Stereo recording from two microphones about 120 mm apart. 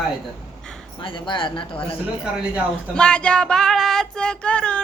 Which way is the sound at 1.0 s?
45° left (ahead or behind).